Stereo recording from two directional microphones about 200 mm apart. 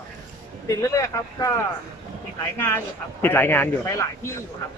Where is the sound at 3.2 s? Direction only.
10° left (ahead or behind).